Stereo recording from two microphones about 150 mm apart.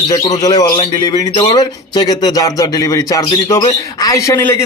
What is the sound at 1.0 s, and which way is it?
A man's voice, 25° left (ahead or behind).